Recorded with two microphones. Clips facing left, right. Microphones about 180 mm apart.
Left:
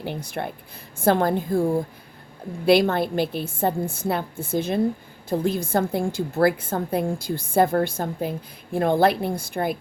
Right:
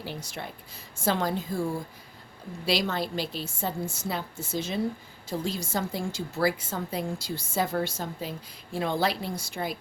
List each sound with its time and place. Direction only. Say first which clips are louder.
0.0 s a woman's voice: left 8 dB; 55° left (ahead or behind)